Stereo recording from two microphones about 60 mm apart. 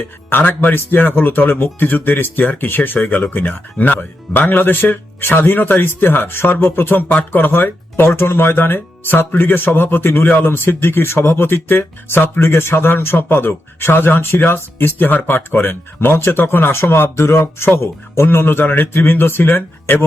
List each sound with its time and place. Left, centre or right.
0.3 s speech: left